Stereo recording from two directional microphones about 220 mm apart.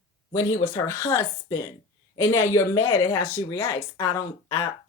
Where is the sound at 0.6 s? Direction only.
15° left (ahead or behind).